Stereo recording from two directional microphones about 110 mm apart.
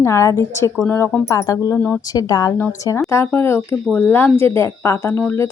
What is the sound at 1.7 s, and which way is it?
Speech, 15° left (ahead or behind).